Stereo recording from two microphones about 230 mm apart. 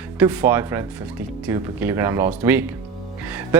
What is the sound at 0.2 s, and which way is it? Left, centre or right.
Speech, centre.